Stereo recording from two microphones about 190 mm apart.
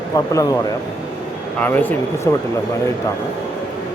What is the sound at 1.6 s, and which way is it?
Speech, 10° left (ahead or behind).